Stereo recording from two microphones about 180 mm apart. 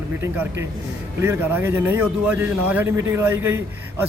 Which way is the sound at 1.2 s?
15° right (ahead or behind).